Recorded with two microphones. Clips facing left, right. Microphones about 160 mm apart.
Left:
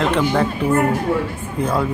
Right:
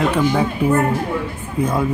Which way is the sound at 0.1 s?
10° right (ahead or behind).